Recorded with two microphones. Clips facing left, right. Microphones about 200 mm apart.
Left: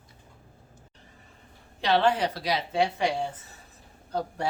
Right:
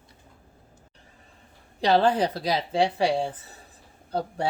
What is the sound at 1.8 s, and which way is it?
Speech, 35° right (ahead or behind).